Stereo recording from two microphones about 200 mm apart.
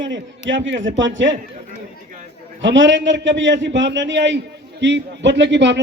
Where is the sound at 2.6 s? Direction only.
65° right (ahead or behind).